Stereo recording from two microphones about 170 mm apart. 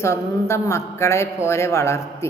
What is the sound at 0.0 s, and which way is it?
A woman's voice, 15° left (ahead or behind).